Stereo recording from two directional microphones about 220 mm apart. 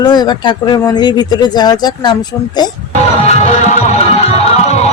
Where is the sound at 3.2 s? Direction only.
30° left (ahead or behind).